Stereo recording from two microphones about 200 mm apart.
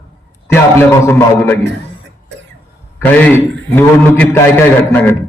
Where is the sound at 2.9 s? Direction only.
10° left (ahead or behind).